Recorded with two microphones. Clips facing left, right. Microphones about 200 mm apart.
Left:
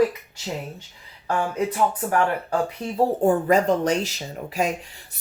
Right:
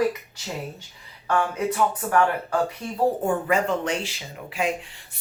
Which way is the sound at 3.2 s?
35° left (ahead or behind).